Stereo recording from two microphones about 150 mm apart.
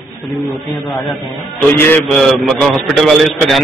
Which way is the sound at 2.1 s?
Centre (ahead or behind).